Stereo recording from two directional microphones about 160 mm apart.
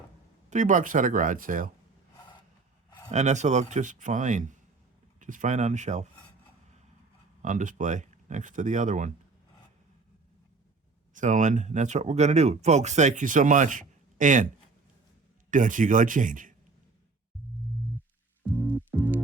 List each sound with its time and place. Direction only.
0.5 s speech: 50° right (ahead or behind)
3.1 s speech: 45° right (ahead or behind)
7.4 s speech: 50° right (ahead or behind)
11.1 s speech: 50° right (ahead or behind)
15.4 s speech: 55° right (ahead or behind)
18.4 s music: 10° right (ahead or behind)